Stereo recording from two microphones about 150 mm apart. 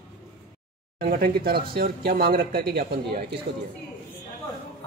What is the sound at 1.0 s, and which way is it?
Speech, 75° right (ahead or behind).